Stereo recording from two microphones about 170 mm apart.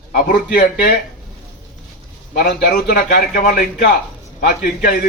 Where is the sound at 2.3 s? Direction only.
65° left (ahead or behind).